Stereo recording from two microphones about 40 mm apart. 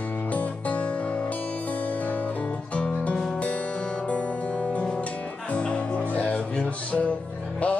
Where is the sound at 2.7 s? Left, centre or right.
Left.